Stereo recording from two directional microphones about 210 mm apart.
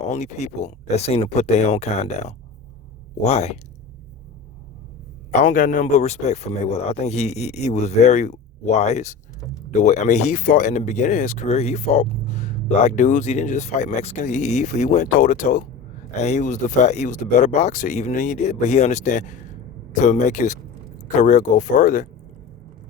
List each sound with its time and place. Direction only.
0.0 s speech: 35° left (ahead or behind)
5.3 s speech: 35° left (ahead or behind)